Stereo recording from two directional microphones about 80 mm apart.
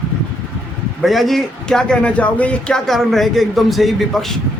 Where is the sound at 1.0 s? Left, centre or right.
Centre.